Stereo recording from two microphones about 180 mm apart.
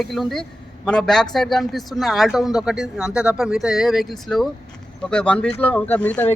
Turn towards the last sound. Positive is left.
turn(degrees=10)  # may be behind; listen again after turning